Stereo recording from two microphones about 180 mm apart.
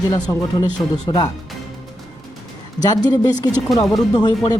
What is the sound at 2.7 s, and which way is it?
A woman's voice, 20° left (ahead or behind).